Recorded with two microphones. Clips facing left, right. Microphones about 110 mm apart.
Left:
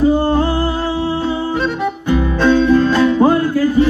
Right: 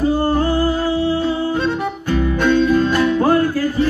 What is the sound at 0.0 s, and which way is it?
Music, 25° left (ahead or behind).